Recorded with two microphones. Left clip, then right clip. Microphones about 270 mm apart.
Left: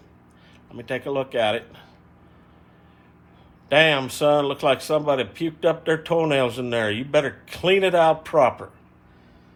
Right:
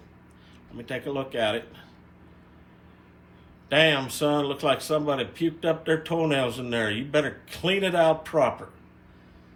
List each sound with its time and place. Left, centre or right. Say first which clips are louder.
0.8 s speech: left 5 dB; left
3.7 s speech: left 4 dB; left